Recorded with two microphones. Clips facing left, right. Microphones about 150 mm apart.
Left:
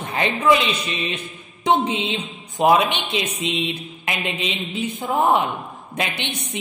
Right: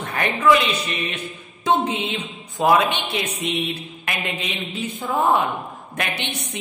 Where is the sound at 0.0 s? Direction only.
20° left (ahead or behind).